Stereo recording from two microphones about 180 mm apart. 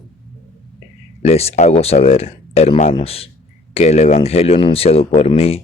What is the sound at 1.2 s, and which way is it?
Speech, 35° left (ahead or behind).